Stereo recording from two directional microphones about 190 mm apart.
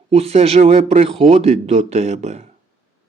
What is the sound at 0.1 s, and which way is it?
Speech, 35° right (ahead or behind).